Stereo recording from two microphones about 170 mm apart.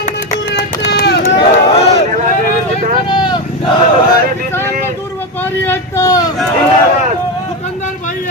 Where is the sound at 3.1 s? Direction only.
25° left (ahead or behind).